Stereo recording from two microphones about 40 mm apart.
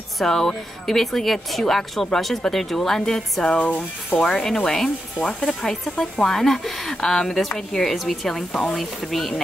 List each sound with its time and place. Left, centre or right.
0.2 s speech: centre
3.5 s speech: left
4.2 s speech: centre